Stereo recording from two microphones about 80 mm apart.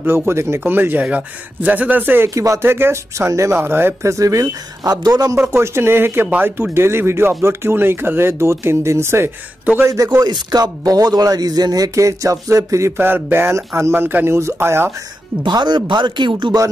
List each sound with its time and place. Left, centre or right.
0.3 s speech: right
2.2 s speech: right
2.6 s speech: right
4.9 s a man's voice: right
5.3 s speech: right
9.8 s speech: right
10.2 s speech: right
12.9 s speech: right
15.4 s speech: right